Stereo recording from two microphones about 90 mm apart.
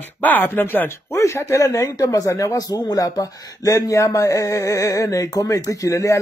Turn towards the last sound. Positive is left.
turn(degrees=35)  # may be behind; listen again after turning